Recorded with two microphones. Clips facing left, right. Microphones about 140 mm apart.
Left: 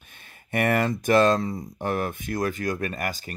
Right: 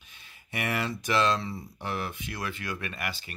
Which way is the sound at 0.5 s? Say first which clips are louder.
Left 8 dB; 50° left (ahead or behind).